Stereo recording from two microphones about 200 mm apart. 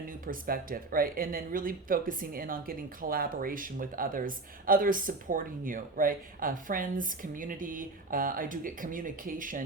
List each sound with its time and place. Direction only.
0.3 s speech: 45° right (ahead or behind)